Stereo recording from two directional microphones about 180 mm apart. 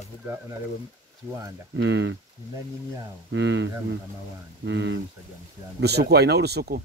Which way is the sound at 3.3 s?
90° right.